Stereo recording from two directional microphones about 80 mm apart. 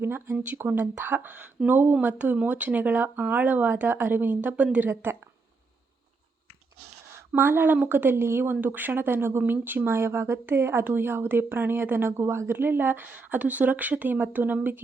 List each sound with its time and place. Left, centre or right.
0.0 s speech: right
7.3 s speech: right